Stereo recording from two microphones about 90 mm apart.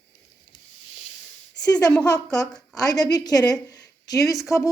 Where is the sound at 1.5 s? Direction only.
50° left (ahead or behind).